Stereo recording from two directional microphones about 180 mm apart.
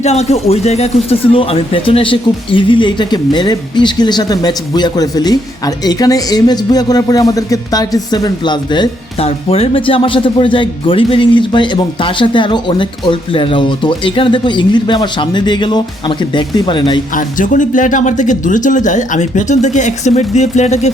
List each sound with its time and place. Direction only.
0.0 s speech: 35° left (ahead or behind)
17.2 s speech: 45° left (ahead or behind)